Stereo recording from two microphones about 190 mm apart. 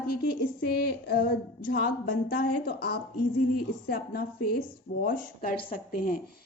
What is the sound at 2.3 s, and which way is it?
A woman's voice, 55° left (ahead or behind).